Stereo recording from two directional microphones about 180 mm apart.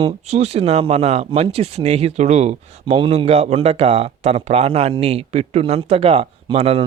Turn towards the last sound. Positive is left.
turn(degrees=-35)  # may be behind; listen again after turning